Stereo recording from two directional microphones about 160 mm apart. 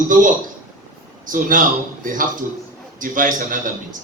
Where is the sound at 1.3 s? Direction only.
55° right (ahead or behind).